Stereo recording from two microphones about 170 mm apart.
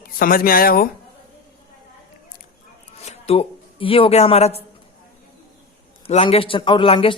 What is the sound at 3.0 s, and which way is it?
Speech, 40° left (ahead or behind).